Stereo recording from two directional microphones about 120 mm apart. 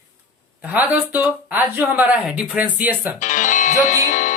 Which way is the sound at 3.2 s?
90° left.